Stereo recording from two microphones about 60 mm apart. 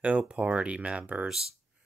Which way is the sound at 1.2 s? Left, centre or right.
Centre.